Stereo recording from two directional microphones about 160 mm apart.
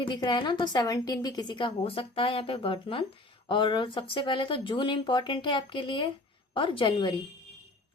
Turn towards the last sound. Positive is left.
turn(degrees=30)  # may be behind; listen again after turning